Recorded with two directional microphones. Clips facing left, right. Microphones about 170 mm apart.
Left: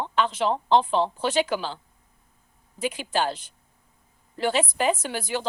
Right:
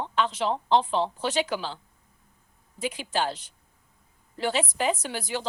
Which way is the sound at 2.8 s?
55° left (ahead or behind).